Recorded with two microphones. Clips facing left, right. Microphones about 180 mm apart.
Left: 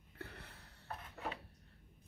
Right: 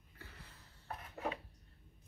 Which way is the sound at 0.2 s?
65° left (ahead or behind).